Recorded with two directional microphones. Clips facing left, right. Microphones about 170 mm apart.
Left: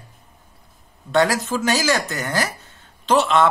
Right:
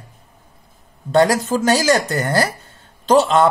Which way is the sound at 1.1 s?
35° right (ahead or behind).